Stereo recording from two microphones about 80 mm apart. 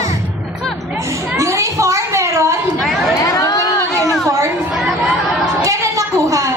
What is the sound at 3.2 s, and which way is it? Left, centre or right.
Chatter, left.